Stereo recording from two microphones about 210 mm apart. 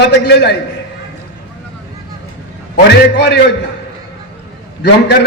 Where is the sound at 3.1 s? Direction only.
55° left (ahead or behind).